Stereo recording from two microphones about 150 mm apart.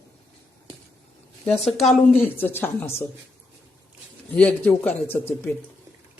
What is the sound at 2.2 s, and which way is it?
Speech, 15° left (ahead or behind).